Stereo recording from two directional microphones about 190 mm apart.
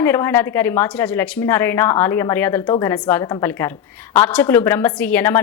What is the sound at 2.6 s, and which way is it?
A woman's voice, 20° left (ahead or behind).